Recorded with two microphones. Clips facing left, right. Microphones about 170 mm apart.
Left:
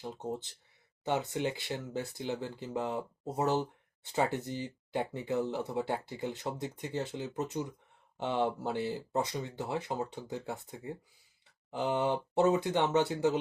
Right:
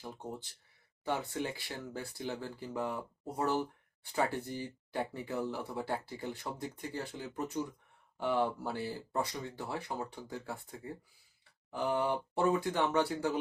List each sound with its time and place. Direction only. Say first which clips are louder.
0.0 s speech: left 5 dB; 20° left (ahead or behind)